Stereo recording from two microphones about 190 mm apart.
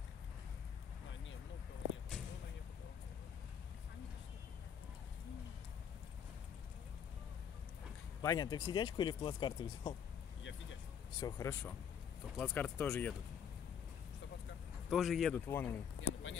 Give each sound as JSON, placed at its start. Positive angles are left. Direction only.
{"t": 8.2, "sound": "speech", "side_deg": 20}
{"t": 11.1, "sound": "speech", "side_deg": 15}
{"t": 14.9, "sound": "speech", "side_deg": 0}
{"t": 16.0, "sound": "a sound", "side_deg": 90}